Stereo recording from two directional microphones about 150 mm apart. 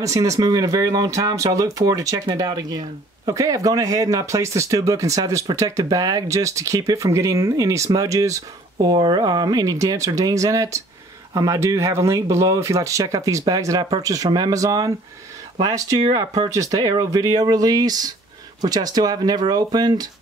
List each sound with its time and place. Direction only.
0.0 s speech: 20° right (ahead or behind)